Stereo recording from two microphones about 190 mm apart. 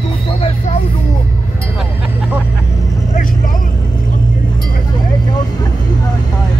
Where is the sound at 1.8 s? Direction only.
5° right (ahead or behind).